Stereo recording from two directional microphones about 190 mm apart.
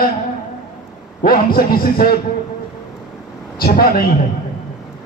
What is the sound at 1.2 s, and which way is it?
Speech, 50° left (ahead or behind).